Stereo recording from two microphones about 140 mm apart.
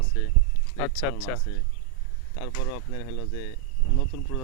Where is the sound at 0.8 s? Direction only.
25° left (ahead or behind).